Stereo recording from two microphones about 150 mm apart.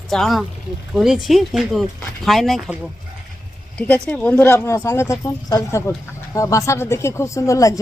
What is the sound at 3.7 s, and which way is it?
Speech, 10° left (ahead or behind).